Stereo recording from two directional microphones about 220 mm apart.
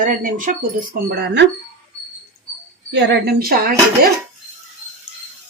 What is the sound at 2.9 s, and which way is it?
Speech, 50° right (ahead or behind).